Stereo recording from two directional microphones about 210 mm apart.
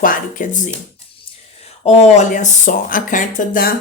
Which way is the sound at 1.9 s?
30° left (ahead or behind).